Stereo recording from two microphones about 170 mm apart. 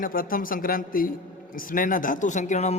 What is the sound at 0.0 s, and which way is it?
A man's voice, 55° left (ahead or behind).